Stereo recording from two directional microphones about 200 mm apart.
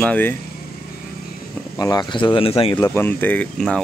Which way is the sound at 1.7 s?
20° left (ahead or behind).